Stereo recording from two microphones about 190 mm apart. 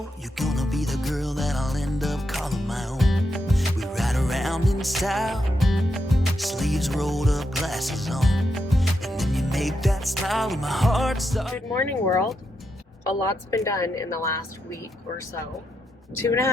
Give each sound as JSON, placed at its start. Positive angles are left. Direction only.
{"t": 0.3, "sound": "music", "side_deg": 0}
{"t": 11.9, "sound": "a woman's voice", "side_deg": 15}
{"t": 16.2, "sound": "a woman's voice", "side_deg": 15}